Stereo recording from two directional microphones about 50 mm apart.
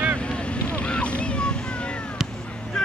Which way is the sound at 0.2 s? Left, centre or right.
Left.